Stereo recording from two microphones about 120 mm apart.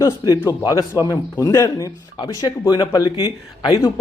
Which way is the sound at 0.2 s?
40° left (ahead or behind).